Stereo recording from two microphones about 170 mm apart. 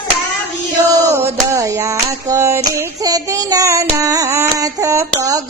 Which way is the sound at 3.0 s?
20° right (ahead or behind).